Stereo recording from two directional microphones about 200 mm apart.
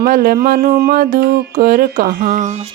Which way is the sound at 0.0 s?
50° right (ahead or behind).